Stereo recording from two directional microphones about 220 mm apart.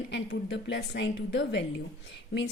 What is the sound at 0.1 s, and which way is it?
A woman's voice, 55° left (ahead or behind).